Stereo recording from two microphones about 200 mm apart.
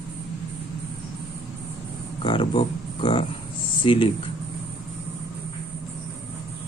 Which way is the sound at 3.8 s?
25° left (ahead or behind).